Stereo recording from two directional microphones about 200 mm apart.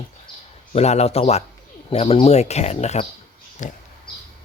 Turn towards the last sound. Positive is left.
turn(degrees=40)  # may be behind; listen again after turning